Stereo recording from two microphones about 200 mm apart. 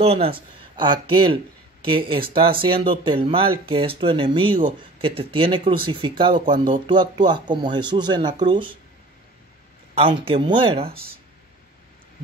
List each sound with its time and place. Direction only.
0.0 s speech: 30° right (ahead or behind)
10.2 s speech: 25° right (ahead or behind)